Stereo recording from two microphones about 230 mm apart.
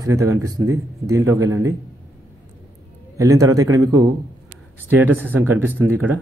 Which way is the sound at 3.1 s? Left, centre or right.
Centre.